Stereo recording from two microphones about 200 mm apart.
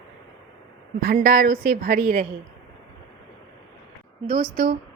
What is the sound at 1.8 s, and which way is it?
Speech, 40° right (ahead or behind).